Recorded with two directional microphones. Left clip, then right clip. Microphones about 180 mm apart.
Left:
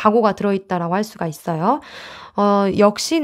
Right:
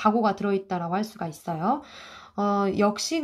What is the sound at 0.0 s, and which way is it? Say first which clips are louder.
Speech: left 8 dB; 45° left (ahead or behind).